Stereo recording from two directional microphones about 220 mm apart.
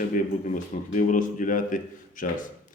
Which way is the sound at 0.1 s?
35° left (ahead or behind).